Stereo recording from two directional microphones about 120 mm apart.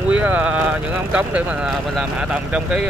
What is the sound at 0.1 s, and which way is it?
Speech, 10° right (ahead or behind).